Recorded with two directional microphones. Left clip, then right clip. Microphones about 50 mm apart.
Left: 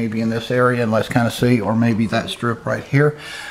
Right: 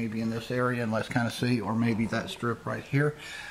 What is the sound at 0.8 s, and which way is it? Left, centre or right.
Speech, left.